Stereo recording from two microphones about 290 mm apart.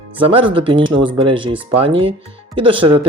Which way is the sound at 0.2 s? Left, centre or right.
Centre.